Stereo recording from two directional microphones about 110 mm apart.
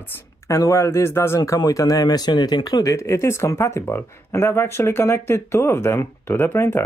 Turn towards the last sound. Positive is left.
turn(degrees=20)  # may be behind; listen again after turning